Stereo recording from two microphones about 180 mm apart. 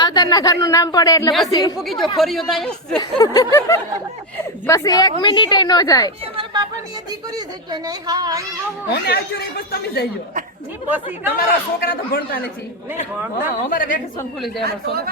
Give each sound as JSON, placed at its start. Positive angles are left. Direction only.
{"t": 0.0, "sound": "speech", "side_deg": 25}
{"t": 1.8, "sound": "speech", "side_deg": 0}
{"t": 3.0, "sound": "speech", "side_deg": 20}
{"t": 6.3, "sound": "speech", "side_deg": -25}
{"t": 8.9, "sound": "speech", "side_deg": 60}
{"t": 10.8, "sound": "speech", "side_deg": -10}
{"t": 11.3, "sound": "speech", "side_deg": 55}
{"t": 13.6, "sound": "a woman's voice", "side_deg": 50}
{"t": 14.6, "sound": "speech", "side_deg": -60}